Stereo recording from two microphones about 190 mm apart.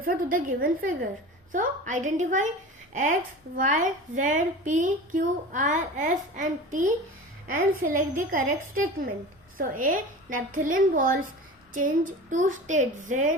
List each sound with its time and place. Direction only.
0.0 s a woman's voice: 45° right (ahead or behind)
9.6 s a woman's voice: 45° right (ahead or behind)